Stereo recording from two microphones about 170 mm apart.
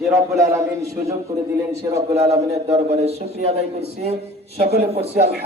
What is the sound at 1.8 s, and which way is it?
Speech, 20° right (ahead or behind).